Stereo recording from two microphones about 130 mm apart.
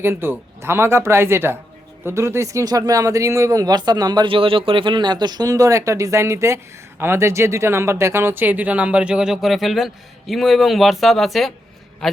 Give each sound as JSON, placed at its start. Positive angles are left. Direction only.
{"t": 0.0, "sound": "speech", "side_deg": -15}